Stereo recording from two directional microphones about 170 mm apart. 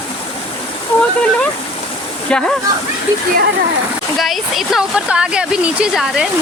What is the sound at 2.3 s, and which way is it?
Speech, 5° left (ahead or behind).